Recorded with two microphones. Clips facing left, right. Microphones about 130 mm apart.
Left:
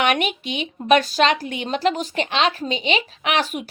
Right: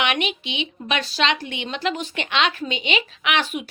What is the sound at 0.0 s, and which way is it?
A woman's voice, 45° left (ahead or behind).